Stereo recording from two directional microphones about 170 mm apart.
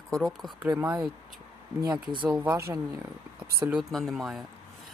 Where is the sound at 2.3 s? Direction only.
5° right (ahead or behind).